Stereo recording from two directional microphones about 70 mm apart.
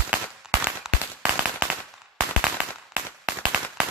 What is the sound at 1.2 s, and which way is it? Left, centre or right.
Firecracker, centre.